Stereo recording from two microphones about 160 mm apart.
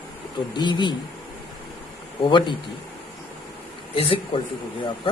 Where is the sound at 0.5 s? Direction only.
30° left (ahead or behind).